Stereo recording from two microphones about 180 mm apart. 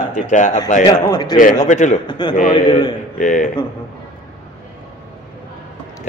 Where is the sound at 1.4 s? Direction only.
45° left (ahead or behind).